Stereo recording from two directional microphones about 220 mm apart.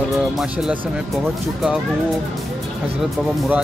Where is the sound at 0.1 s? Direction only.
5° right (ahead or behind).